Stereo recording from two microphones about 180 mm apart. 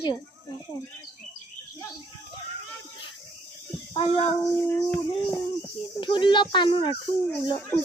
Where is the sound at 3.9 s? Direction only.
30° left (ahead or behind).